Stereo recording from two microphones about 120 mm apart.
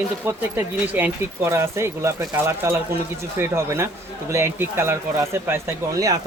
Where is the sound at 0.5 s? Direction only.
15° right (ahead or behind).